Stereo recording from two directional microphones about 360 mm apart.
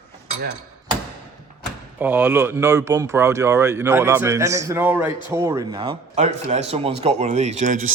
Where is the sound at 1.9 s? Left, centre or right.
Centre.